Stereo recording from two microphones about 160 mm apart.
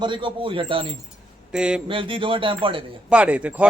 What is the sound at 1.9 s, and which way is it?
Speech, 35° right (ahead or behind).